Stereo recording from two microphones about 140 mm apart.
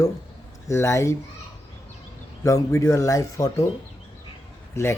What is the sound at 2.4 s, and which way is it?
Speech, 20° left (ahead or behind).